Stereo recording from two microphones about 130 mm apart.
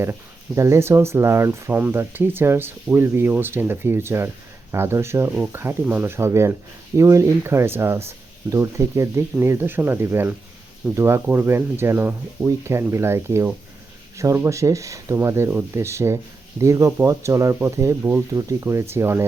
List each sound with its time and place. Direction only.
0.0 s speech: 20° right (ahead or behind)